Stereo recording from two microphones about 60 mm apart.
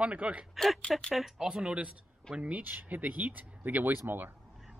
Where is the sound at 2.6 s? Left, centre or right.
Right.